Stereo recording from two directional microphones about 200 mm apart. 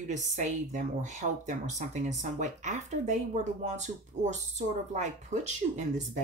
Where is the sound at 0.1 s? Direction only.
35° right (ahead or behind).